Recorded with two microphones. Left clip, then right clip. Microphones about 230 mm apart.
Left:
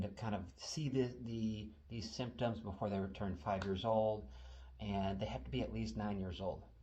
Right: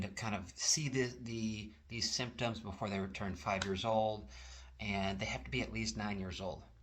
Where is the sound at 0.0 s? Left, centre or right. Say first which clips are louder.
Right 3 dB; centre.